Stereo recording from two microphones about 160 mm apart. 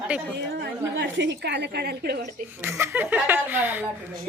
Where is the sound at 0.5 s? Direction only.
80° right.